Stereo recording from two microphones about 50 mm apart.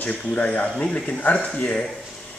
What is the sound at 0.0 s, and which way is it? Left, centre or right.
Speech, left.